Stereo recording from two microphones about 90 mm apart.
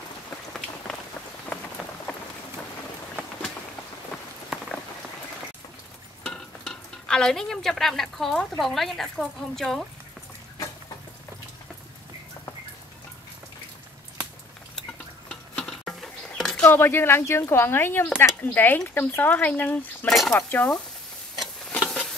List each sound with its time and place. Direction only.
0.5 s rain: 5° left (ahead or behind)
1.5 s rain on surface: 20° left (ahead or behind)
6.2 s stir: 5° left (ahead or behind)
15.5 s a sound: 5° left (ahead or behind)
16.6 s speech: 25° left (ahead or behind)
20.1 s speech: 5° left (ahead or behind)
20.3 s speech: 20° left (ahead or behind)
21.4 s stir: centre (ahead or behind)